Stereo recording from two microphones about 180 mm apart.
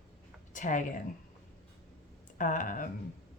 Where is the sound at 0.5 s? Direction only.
45° left (ahead or behind).